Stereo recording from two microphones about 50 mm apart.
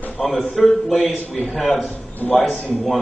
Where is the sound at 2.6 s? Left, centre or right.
Left.